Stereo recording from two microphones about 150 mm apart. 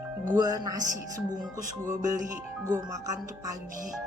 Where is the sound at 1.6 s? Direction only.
55° right (ahead or behind).